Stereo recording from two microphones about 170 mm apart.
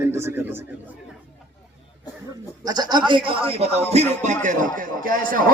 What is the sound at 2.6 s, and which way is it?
Speech, 25° right (ahead or behind).